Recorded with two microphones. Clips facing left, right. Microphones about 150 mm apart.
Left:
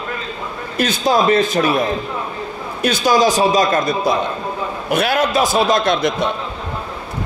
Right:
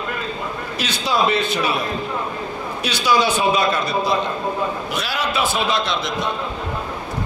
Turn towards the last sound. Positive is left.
turn(degrees=50)  # may be behind; listen again after turning